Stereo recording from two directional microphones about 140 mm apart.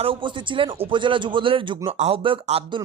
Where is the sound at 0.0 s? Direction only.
40° right (ahead or behind).